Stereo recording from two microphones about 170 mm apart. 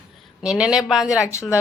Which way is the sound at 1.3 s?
15° left (ahead or behind).